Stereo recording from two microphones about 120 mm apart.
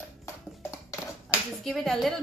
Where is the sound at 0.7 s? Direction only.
25° left (ahead or behind).